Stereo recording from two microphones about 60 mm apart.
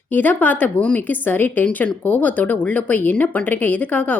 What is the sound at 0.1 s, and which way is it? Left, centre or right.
Speech, left.